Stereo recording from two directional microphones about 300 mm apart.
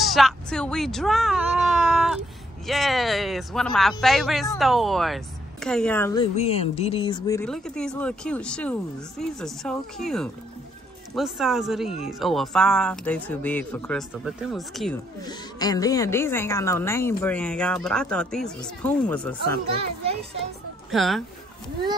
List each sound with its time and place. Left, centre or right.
0.0 s cat: centre
4.0 s a woman's voice: centre
6.3 s a woman's voice: left; by 15.0 s centre
15.2 s a woman's voice: centre
20.9 s a woman's voice: centre